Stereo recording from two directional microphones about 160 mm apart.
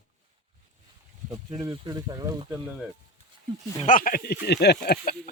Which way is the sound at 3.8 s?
60° left (ahead or behind).